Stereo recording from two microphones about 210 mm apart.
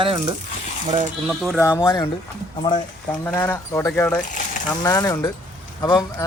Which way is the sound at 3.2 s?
10° left (ahead or behind).